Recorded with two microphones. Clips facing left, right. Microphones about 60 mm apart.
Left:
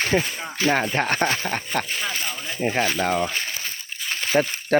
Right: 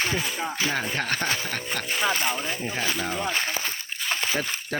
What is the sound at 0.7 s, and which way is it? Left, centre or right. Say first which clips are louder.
Speech: left 5 dB; left.